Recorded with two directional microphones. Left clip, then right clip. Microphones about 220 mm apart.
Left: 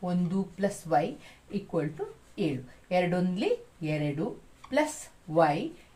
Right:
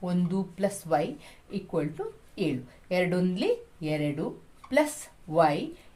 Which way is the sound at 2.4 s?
40° right (ahead or behind).